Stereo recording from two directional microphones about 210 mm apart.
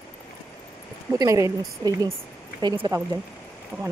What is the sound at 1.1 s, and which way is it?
Speech, 15° right (ahead or behind).